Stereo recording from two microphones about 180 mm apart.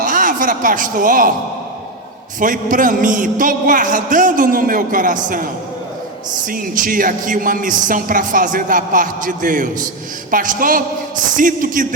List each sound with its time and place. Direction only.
0.0 s a sound: 50° right (ahead or behind)
2.4 s speech: 50° right (ahead or behind)
6.5 s speech: 50° right (ahead or behind)